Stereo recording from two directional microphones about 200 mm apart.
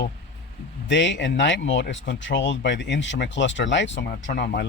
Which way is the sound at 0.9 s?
65° left (ahead or behind).